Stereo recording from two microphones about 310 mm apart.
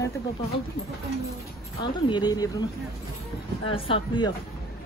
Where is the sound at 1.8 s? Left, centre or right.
Centre.